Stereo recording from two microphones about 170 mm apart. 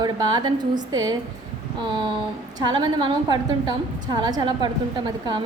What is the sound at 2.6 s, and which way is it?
A woman's voice, 25° right (ahead or behind).